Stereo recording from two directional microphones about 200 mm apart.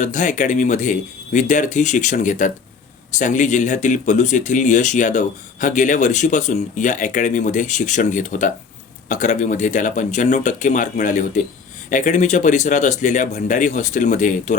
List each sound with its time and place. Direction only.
0.0 s speech: 40° left (ahead or behind)